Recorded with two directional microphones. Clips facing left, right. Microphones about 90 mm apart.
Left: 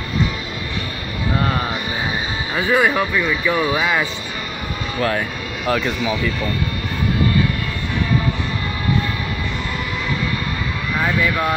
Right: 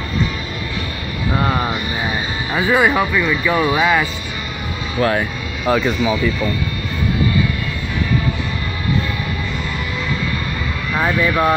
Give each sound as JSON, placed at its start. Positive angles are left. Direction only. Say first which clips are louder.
{"t": 1.4, "sound": "music", "louder": "right 3 dB", "side_deg": -25}
{"t": 2.5, "sound": "speech", "louder": "right 2 dB", "side_deg": -15}
{"t": 3.2, "sound": "speech", "louder": "right 2 dB", "side_deg": 0}
{"t": 5.0, "sound": "speech", "louder": "right 4 dB", "side_deg": -10}
{"t": 11.0, "sound": "speech", "louder": "right 3 dB", "side_deg": -40}